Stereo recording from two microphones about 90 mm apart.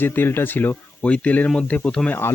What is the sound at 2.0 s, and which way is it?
Speech, 25° left (ahead or behind).